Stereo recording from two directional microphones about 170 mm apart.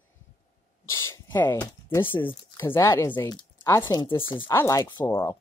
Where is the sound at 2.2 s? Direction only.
15° left (ahead or behind); by 4.5 s 30° left (ahead or behind).